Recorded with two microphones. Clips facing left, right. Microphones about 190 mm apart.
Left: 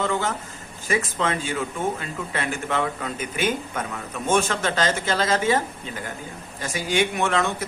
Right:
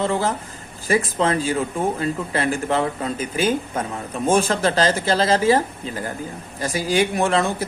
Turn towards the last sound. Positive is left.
turn(degrees=-35)  # may be behind; listen again after turning